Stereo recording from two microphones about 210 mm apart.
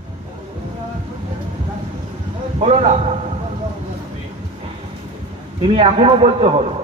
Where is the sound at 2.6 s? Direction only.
30° right (ahead or behind).